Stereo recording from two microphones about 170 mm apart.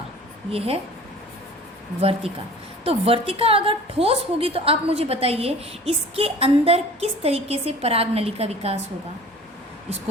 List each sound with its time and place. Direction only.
0.5 s a woman's voice: 35° right (ahead or behind)
2.0 s a woman's voice: 35° right (ahead or behind)